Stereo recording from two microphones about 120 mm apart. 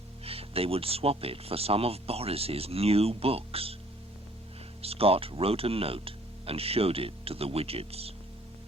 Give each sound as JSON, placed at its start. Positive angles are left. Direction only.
{"t": 0.3, "sound": "speech", "side_deg": -55}
{"t": 4.8, "sound": "speech", "side_deg": -55}